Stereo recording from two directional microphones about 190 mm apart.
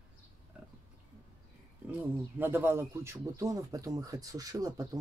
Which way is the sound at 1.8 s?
10° right (ahead or behind).